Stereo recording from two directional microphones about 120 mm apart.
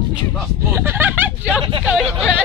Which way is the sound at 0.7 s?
20° right (ahead or behind).